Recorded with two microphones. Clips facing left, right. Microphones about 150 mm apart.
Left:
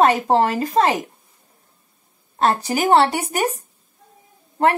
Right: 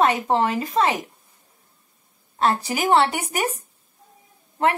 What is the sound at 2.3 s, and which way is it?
Speech, 40° left (ahead or behind).